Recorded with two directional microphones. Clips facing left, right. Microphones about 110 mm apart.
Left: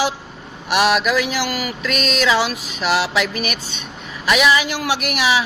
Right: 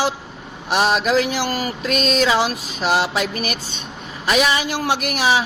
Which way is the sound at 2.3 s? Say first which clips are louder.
Even; 40° right (ahead or behind).